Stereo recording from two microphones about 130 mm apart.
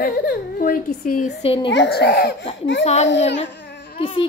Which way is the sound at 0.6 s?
90° left.